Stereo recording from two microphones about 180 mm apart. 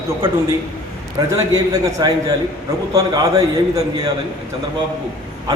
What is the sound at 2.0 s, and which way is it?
A man's voice, 20° right (ahead or behind).